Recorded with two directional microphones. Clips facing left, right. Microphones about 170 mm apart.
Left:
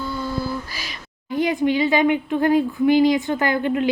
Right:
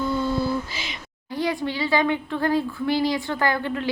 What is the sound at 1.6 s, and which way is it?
A woman's voice, 20° left (ahead or behind).